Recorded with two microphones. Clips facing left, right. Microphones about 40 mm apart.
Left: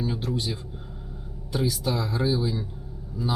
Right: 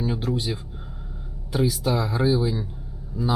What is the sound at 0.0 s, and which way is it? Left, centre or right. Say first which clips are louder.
Speech: right 3 dB; centre.